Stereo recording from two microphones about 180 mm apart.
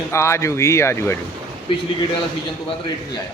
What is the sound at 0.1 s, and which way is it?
A man's voice, 15° left (ahead or behind).